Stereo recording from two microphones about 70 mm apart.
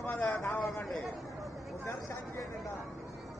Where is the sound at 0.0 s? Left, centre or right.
Left.